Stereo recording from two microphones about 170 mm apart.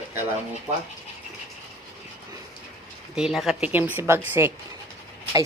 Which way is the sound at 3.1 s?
5° right (ahead or behind).